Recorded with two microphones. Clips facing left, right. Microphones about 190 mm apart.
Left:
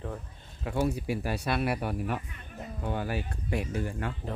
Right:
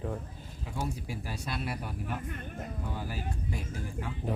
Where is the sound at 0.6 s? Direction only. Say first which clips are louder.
Left 8 dB; 70° left (ahead or behind).